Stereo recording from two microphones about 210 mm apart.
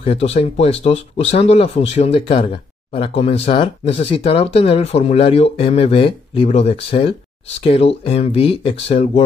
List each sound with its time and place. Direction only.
0.0 s speech: 30° left (ahead or behind)